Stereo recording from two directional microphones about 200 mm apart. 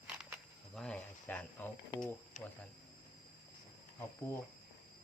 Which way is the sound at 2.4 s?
35° left (ahead or behind).